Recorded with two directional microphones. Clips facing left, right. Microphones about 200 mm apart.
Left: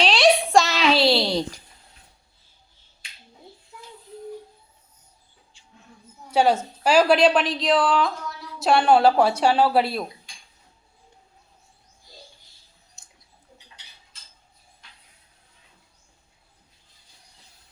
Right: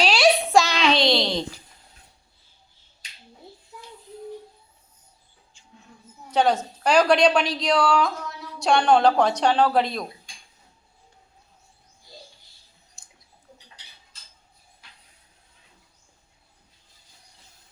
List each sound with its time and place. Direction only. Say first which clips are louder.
0.0 s a sound: left 1 dB; centre (ahead or behind)
5.5 s mouse: right 1 dB; 45° right (ahead or behind)
6.3 s a woman's voice: left 1 dB; 10° left (ahead or behind)